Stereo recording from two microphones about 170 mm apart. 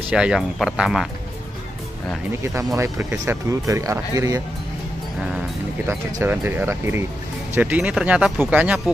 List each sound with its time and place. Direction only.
0.1 s speech: 5° right (ahead or behind)
2.4 s speech: 15° right (ahead or behind)
5.9 s speech: 15° right (ahead or behind)